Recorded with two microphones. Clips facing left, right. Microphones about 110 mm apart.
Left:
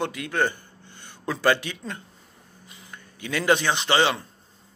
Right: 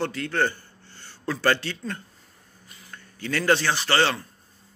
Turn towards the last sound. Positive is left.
turn(degrees=15)  # may be behind; listen again after turning